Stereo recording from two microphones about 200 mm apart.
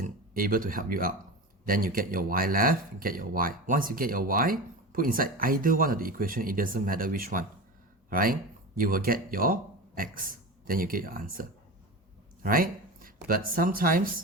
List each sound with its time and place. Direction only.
0.0 s speech: 45° right (ahead or behind)